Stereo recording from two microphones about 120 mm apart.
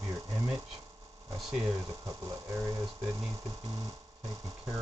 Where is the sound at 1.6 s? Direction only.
25° right (ahead or behind).